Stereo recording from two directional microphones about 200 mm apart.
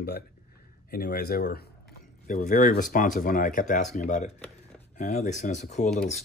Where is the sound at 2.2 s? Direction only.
40° left (ahead or behind).